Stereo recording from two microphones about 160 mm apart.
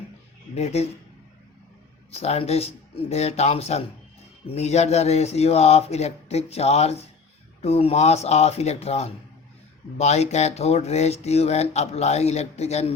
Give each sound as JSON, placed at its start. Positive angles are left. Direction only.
{"t": 0.5, "sound": "speech", "side_deg": 40}
{"t": 2.0, "sound": "speech", "side_deg": 40}